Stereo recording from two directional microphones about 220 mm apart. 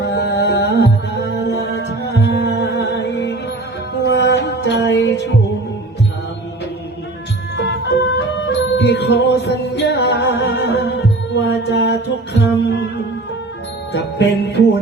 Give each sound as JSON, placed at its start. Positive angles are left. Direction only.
{"t": 0.0, "sound": "music", "side_deg": 50}
{"t": 7.5, "sound": "music", "side_deg": 50}
{"t": 13.9, "sound": "jingle bell", "side_deg": 50}